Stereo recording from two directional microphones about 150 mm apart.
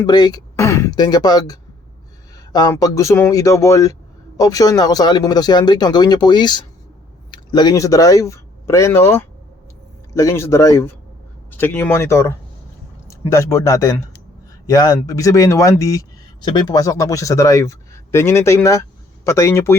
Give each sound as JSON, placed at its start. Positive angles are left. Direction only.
{"t": 0.0, "sound": "speech", "side_deg": 25}